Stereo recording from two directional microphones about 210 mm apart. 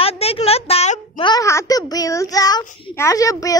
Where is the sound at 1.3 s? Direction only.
15° left (ahead or behind).